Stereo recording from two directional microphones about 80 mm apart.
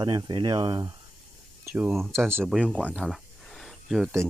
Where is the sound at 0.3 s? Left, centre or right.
Right.